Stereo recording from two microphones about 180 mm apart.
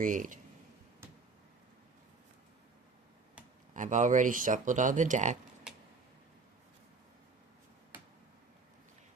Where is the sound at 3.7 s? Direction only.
45° right (ahead or behind).